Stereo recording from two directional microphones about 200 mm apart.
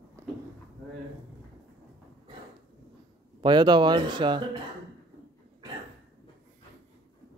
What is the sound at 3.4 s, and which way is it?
A man's voice, 20° right (ahead or behind).